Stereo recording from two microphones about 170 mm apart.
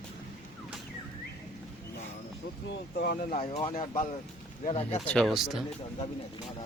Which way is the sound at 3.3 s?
35° left (ahead or behind).